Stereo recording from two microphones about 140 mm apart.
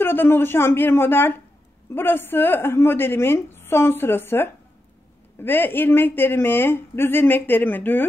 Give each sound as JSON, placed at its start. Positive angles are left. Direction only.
{"t": 0.0, "sound": "speech", "side_deg": 15}